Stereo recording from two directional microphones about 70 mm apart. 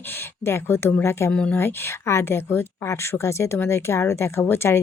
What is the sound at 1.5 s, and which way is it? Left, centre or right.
Speech, left.